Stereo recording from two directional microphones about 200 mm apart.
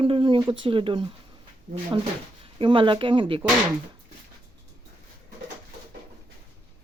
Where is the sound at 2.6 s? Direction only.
25° right (ahead or behind).